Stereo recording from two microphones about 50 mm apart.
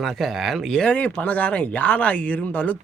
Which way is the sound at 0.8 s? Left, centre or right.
Left.